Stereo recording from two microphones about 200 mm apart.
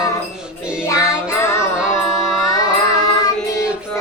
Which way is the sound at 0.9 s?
15° left (ahead or behind).